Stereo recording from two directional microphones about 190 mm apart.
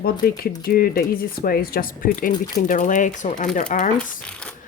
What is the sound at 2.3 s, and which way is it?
Speech, 20° left (ahead or behind).